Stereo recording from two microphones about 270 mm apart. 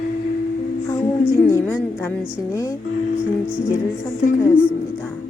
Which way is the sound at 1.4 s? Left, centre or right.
Centre.